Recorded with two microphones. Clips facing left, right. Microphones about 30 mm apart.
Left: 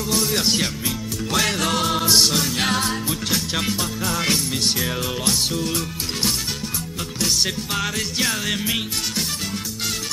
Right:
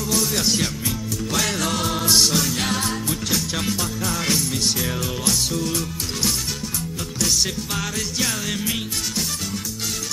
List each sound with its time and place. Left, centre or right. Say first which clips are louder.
0.1 s music: left 1 dB; centre